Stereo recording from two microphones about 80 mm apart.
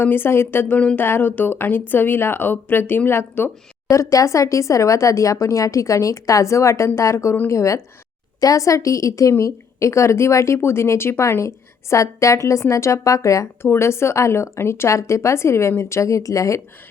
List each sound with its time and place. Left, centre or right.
0.0 s speech: left
3.8 s a woman's voice: left